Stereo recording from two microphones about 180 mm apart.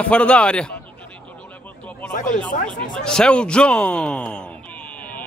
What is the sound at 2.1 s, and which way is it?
Speech, 45° left (ahead or behind).